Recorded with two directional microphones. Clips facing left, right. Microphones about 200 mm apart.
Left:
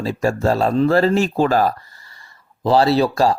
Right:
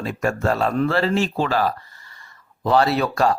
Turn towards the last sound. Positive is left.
turn(degrees=30)  # may be behind; listen again after turning